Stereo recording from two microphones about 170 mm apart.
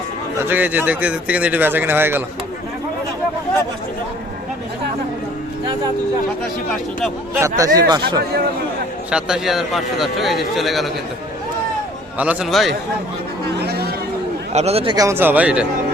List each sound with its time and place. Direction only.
0.3 s speech: 10° right (ahead or behind)
7.3 s speech: 20° right (ahead or behind)
9.0 s speech: 5° right (ahead or behind)
12.1 s speech: 10° right (ahead or behind)
13.6 s a sound: 70° right (ahead or behind)
14.5 s speech: 40° right (ahead or behind)
14.9 s speech: 15° right (ahead or behind)